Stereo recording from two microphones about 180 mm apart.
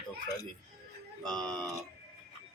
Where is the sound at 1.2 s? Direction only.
5° left (ahead or behind).